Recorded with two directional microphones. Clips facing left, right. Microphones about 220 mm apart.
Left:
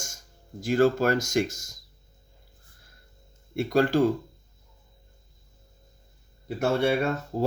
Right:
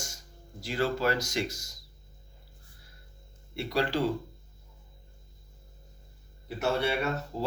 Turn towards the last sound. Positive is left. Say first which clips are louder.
# left 5 dB
turn(degrees=45)  # may be behind; listen again after turning